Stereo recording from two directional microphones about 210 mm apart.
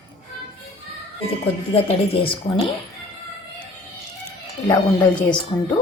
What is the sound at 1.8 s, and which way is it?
Speech, 30° left (ahead or behind).